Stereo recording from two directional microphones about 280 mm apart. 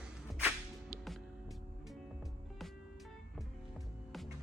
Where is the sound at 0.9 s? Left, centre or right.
Centre.